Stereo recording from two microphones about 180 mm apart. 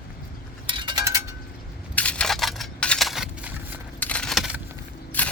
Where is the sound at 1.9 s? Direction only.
5° left (ahead or behind).